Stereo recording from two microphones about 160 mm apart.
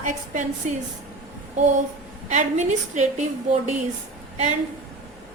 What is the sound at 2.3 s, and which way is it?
A woman's voice, 50° right (ahead or behind).